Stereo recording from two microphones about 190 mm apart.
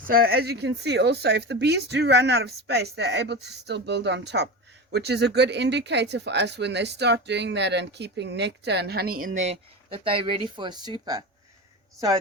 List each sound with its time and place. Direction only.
0.1 s speech: 50° right (ahead or behind); by 11.2 s 20° right (ahead or behind)